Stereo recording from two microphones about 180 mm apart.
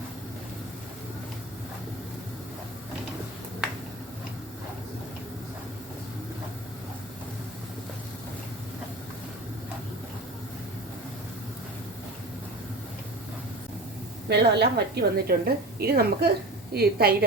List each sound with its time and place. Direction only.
14.3 s a woman's voice: 65° right (ahead or behind)